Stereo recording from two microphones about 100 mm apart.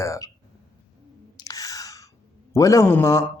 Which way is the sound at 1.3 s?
35° left (ahead or behind).